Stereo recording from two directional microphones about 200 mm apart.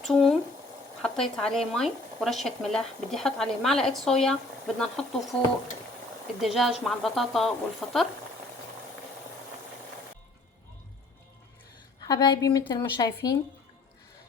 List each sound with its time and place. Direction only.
0.0 s speech: centre (ahead or behind)
6.4 s speech: centre (ahead or behind)
12.0 s a woman's voice: 20° left (ahead or behind)